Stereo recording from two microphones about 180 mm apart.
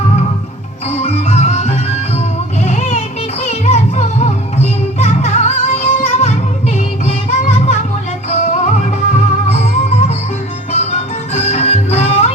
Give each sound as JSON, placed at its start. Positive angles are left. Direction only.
{"t": 0.9, "sound": "music", "side_deg": 35}
{"t": 2.6, "sound": "vehicle", "side_deg": 40}
{"t": 3.4, "sound": "music", "side_deg": 35}
{"t": 11.3, "sound": "music", "side_deg": 35}